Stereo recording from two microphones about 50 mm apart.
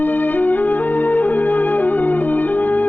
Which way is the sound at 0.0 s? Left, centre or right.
Left.